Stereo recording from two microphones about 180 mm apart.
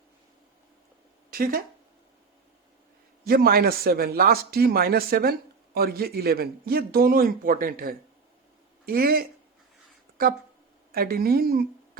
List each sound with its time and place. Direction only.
1.3 s speech: 55° right (ahead or behind)
3.2 s a man's voice: 55° right (ahead or behind)